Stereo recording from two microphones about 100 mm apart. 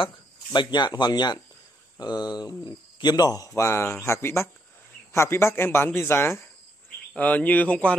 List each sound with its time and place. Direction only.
0.0 s speech: 50° left (ahead or behind); by 8.0 s 15° left (ahead or behind)